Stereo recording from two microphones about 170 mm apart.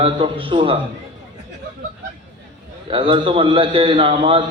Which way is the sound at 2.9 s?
30° right (ahead or behind).